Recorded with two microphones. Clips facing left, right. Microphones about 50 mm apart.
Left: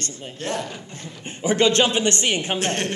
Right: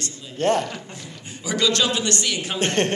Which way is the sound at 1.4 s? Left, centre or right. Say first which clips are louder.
Left 4 dB; left.